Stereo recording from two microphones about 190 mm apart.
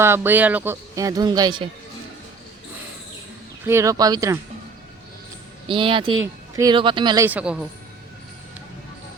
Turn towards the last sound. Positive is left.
turn(degrees=-5)  # may be behind; listen again after turning